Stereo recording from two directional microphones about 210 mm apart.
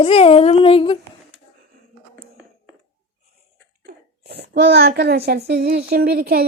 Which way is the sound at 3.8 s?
50° right (ahead or behind).